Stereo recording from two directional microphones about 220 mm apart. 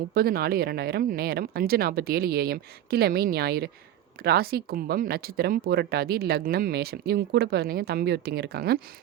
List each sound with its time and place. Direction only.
0.1 s speech: 45° right (ahead or behind)